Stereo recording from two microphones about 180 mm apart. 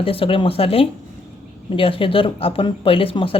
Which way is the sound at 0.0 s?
30° left (ahead or behind).